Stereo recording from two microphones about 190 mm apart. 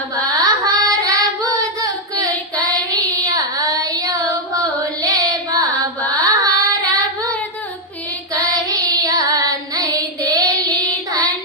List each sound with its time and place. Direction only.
0.4 s singing: 20° right (ahead or behind)
3.2 s child singing: 20° right (ahead or behind)
5.0 s carnatic music: 20° right (ahead or behind)
6.2 s child singing: 20° right (ahead or behind)
8.4 s child singing: 20° right (ahead or behind)